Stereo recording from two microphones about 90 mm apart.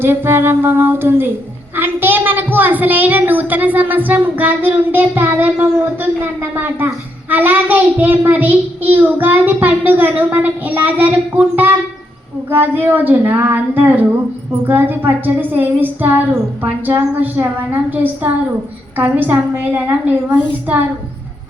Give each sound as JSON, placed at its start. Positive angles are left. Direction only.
{"t": 0.0, "sound": "a woman's voice", "side_deg": -25}